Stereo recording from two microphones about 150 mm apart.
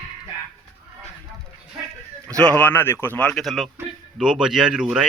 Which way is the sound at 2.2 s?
10° left (ahead or behind).